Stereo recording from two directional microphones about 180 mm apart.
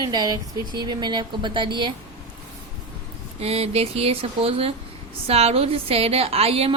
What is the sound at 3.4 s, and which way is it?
A woman's voice, 35° right (ahead or behind).